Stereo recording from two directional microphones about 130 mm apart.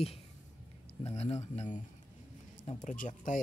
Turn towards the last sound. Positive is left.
turn(degrees=80)